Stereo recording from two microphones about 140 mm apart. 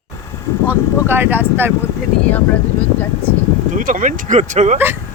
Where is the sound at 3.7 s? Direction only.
70° right (ahead or behind).